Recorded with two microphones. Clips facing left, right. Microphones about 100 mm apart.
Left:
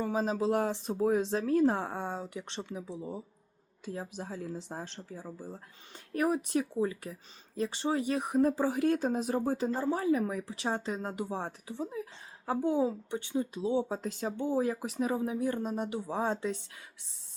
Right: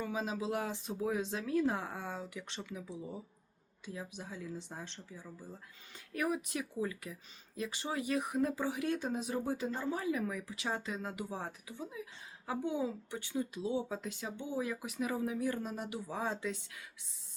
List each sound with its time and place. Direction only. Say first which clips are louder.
0.0 s speech: left 7 dB; 35° left (ahead or behind)
3.8 s speech: left 6 dB; 40° left (ahead or behind)
13.1 s speech: left 5 dB; 20° left (ahead or behind)